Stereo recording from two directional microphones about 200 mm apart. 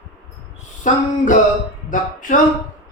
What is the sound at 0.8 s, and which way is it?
Mantra, 40° left (ahead or behind).